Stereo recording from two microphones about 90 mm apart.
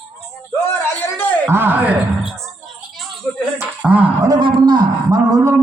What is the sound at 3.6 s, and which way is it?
Music, 20° right (ahead or behind).